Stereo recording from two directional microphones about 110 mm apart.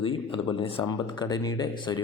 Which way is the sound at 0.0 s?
55° left (ahead or behind).